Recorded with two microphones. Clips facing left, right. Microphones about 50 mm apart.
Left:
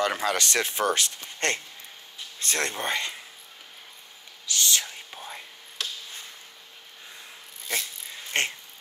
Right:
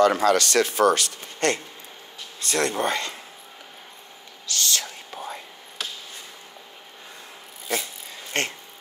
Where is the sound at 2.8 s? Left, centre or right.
Left.